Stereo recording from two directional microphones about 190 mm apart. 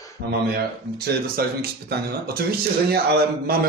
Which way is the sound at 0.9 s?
55° right (ahead or behind).